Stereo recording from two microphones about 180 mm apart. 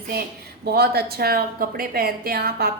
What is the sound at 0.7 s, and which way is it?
A woman's voice, 60° right (ahead or behind).